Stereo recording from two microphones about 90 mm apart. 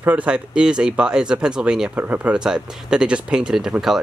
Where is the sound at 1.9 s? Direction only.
20° right (ahead or behind).